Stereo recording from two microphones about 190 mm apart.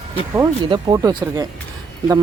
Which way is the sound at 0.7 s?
20° right (ahead or behind).